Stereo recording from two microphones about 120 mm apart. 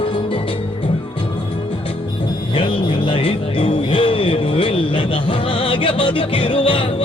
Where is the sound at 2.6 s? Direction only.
45° left (ahead or behind).